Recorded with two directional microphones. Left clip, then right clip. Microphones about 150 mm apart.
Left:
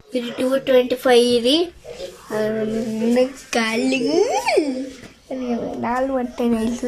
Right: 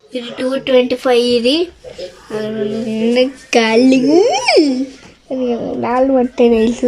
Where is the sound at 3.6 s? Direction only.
45° right (ahead or behind).